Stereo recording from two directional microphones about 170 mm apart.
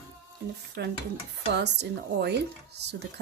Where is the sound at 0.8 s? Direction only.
85° right.